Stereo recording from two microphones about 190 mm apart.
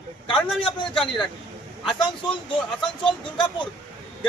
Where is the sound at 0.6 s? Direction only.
25° left (ahead or behind).